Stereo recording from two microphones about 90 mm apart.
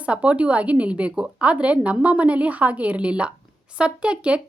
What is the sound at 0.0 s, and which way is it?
Speech, 15° right (ahead or behind).